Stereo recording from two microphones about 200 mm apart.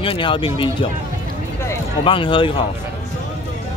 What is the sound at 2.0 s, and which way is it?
Speech, 25° left (ahead or behind).